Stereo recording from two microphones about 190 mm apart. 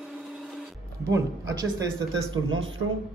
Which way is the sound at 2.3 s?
90° right.